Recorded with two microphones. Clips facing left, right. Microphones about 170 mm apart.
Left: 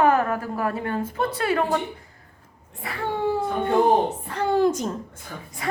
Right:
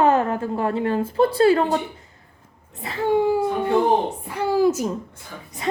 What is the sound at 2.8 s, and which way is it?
Speech, 25° right (ahead or behind).